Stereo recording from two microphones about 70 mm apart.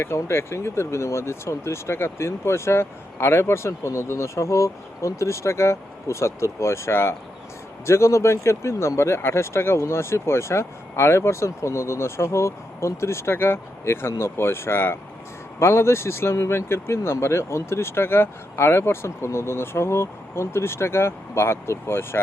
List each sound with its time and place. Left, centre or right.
0.0 s speech: left